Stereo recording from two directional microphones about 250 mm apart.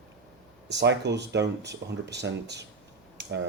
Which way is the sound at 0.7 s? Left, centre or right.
Right.